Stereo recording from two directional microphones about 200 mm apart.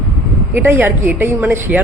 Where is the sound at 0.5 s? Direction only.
10° right (ahead or behind).